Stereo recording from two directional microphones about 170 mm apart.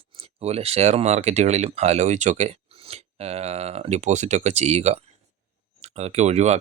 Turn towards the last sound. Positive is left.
turn(degrees=-40)  # may be behind; listen again after turning